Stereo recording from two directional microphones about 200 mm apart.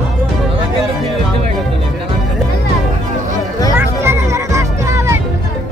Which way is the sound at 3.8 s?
10° right (ahead or behind).